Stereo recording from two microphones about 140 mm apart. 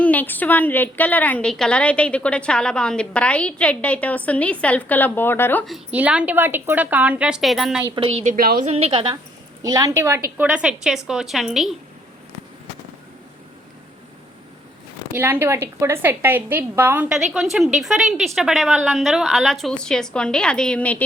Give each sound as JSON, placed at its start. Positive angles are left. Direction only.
{"t": 0.0, "sound": "a woman's voice", "side_deg": 10}
{"t": 5.6, "sound": "a woman's voice", "side_deg": -5}
{"t": 7.9, "sound": "a woman's voice", "side_deg": -45}
{"t": 8.3, "sound": "a woman's voice", "side_deg": -90}
{"t": 8.6, "sound": "a woman's voice", "side_deg": -45}
{"t": 9.6, "sound": "a woman's voice", "side_deg": -25}
{"t": 10.3, "sound": "a woman's voice", "side_deg": -10}
{"t": 15.1, "sound": "a woman's voice", "side_deg": -15}
{"t": 17.3, "sound": "a woman's voice", "side_deg": 0}